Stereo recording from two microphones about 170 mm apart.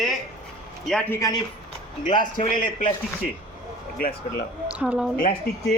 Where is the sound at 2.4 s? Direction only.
55° left (ahead or behind).